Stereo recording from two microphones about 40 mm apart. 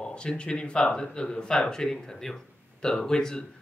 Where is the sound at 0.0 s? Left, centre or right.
Left.